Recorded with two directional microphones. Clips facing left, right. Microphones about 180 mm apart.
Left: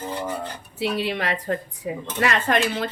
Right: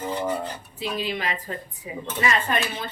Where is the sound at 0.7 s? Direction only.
70° left (ahead or behind).